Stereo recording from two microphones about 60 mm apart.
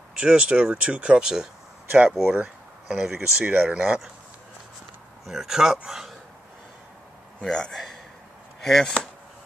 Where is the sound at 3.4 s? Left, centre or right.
Right.